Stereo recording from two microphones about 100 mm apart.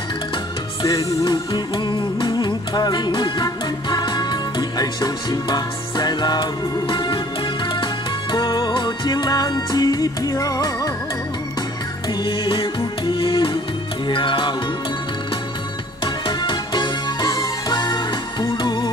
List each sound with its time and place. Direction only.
0.8 s music: 45° left (ahead or behind)
12.1 s music: 60° left (ahead or behind)
16.3 s music: 50° left (ahead or behind)